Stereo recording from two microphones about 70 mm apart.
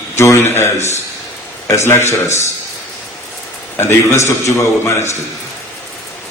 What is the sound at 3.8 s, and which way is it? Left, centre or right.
A man's voice, left.